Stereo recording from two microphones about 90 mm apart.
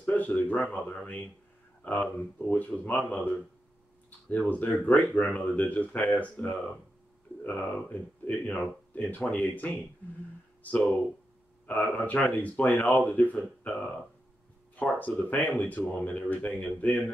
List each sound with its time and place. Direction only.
0.0 s speech: 20° left (ahead or behind)
7.4 s speech: 20° left (ahead or behind)